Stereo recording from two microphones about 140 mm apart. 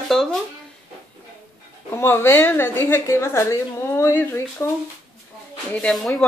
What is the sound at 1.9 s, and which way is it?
A woman's voice, 15° left (ahead or behind).